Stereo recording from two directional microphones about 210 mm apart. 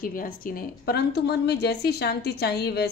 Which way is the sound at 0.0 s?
40° left (ahead or behind).